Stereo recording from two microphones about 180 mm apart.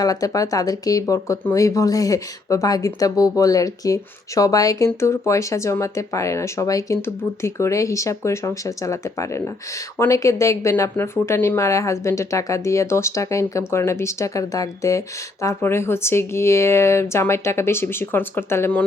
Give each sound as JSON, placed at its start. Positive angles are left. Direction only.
{"t": 0.0, "sound": "speech", "side_deg": 20}